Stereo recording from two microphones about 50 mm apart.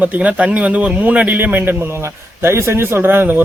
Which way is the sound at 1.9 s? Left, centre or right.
Right.